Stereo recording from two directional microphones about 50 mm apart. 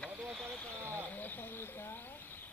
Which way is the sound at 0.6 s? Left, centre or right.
Left.